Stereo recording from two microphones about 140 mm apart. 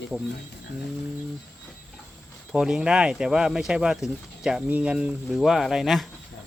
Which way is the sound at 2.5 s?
5° right (ahead or behind).